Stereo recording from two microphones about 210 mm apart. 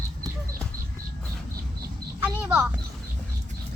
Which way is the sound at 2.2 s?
5° right (ahead or behind).